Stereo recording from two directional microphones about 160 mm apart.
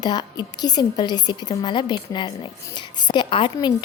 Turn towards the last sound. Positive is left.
turn(degrees=30)  # may be behind; listen again after turning